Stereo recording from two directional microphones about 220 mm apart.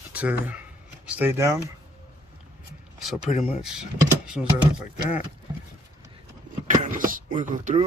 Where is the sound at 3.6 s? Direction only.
5° right (ahead or behind).